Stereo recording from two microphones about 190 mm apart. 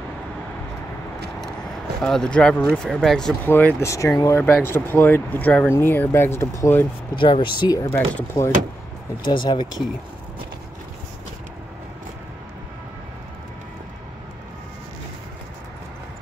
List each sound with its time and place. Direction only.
2.0 s speech: 5° left (ahead or behind)
7.2 s speech: 25° left (ahead or behind)
7.9 s speech: 10° left (ahead or behind)
9.2 s speech: 25° left (ahead or behind)